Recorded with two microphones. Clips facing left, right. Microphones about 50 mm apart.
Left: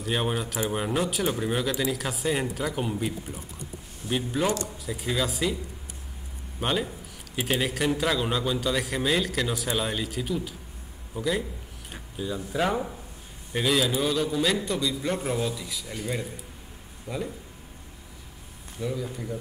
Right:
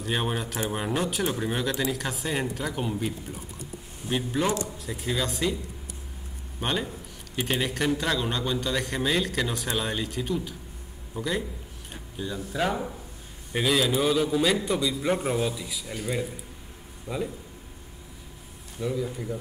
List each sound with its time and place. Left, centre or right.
0.0 s speech: centre
6.6 s speech: centre
11.9 s a sound: centre
12.5 s speech: centre
18.8 s speech: centre